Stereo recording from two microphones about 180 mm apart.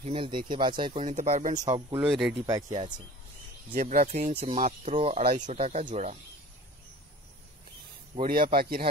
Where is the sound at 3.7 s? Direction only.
50° right (ahead or behind).